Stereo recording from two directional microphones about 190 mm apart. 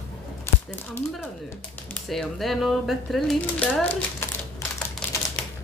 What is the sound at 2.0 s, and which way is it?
A woman's voice, centre (ahead or behind).